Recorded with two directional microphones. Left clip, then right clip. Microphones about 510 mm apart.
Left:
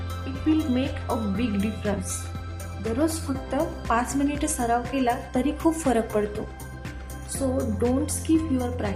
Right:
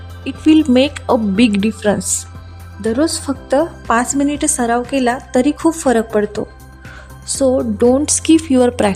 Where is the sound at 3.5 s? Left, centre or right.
Centre.